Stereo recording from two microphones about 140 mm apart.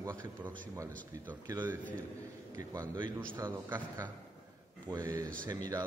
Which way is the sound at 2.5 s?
30° right (ahead or behind).